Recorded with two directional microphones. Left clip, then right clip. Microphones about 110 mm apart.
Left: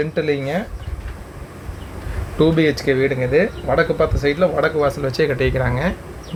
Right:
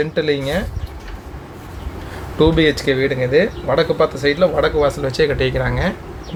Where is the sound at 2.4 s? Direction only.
10° left (ahead or behind).